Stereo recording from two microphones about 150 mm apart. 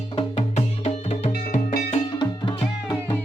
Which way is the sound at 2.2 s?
30° left (ahead or behind).